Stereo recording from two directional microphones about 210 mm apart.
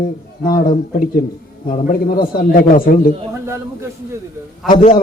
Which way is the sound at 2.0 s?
45° left (ahead or behind).